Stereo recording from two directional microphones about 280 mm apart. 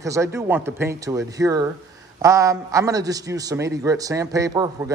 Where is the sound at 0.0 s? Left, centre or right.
Centre.